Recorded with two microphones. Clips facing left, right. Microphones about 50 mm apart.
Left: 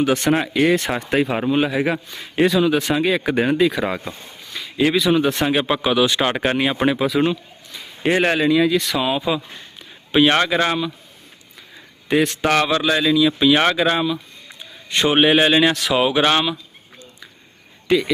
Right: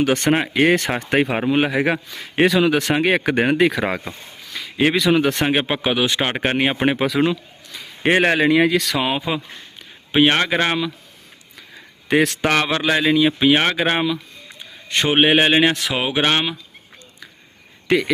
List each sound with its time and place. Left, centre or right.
0.0 s speech: right
1.5 s speech: right
3.8 s speech: right
5.5 s speech: right
7.1 s a man's voice: right
8.0 s speech: right
9.0 s speech: right
10.1 s speech: right
10.5 s speech: right
12.0 s speech: right
12.6 s a man's voice: right
15.1 s speech: right
17.8 s speech: right